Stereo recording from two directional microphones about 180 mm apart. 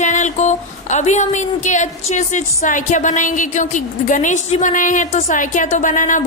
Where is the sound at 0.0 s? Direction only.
45° left (ahead or behind).